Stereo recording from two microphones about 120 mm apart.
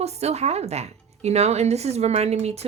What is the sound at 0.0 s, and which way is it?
Speech, 60° right (ahead or behind).